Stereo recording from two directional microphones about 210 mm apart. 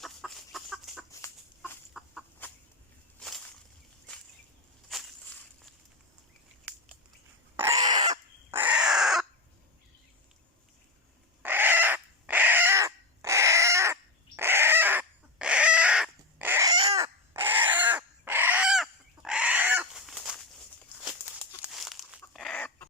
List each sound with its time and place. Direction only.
0.0 s chicken: centre (ahead or behind)
1.2 s chicken: 10° left (ahead or behind)
1.9 s chicken: centre (ahead or behind)
3.2 s a sound: 5° left (ahead or behind)
4.9 s walk: centre (ahead or behind)
7.5 s a sound: 15° right (ahead or behind)
8.1 s fowl: 10° right (ahead or behind)
11.4 s bird: 10° right (ahead or behind)
17.3 s chicken: 10° right (ahead or behind); by 22.9 s 5° left (ahead or behind)